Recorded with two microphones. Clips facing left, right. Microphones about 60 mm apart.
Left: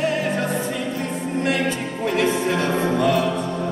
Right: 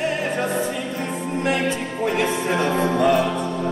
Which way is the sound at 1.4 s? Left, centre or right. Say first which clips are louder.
Right 1 dB; right.